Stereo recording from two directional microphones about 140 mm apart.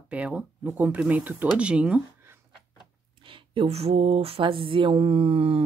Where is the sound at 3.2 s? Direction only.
40° right (ahead or behind).